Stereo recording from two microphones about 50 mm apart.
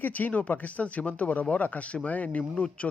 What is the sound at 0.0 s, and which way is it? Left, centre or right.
Speech, left.